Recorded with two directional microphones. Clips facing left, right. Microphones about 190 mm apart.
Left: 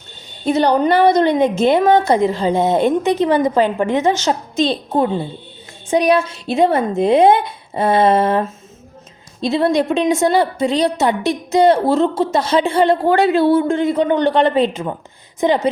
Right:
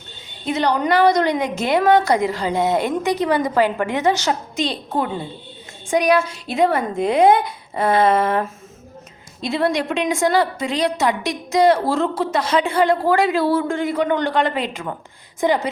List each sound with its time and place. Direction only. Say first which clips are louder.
0.4 s a woman's voice: left 5 dB; 35° left (ahead or behind)